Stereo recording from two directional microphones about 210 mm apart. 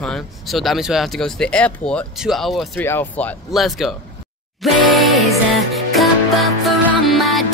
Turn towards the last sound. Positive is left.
turn(degrees=0)  # may be behind; listen again after turning